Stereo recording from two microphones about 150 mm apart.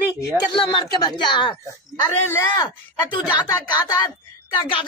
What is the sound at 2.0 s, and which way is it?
Speech, 15° left (ahead or behind).